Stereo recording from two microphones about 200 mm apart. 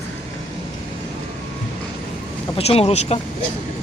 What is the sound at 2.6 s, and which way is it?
Speech, 30° left (ahead or behind).